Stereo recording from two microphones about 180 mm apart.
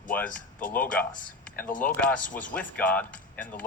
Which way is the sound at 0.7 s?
10° left (ahead or behind).